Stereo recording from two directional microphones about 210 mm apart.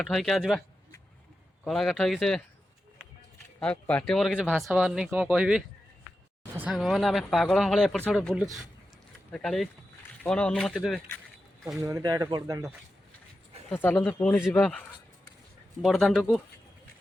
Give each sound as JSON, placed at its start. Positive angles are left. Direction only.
{"t": 0.0, "sound": "speech", "side_deg": 0}
{"t": 1.6, "sound": "speech", "side_deg": 0}
{"t": 3.6, "sound": "speech", "side_deg": 5}
{"t": 11.6, "sound": "speech", "side_deg": -15}
{"t": 13.7, "sound": "speech", "side_deg": 10}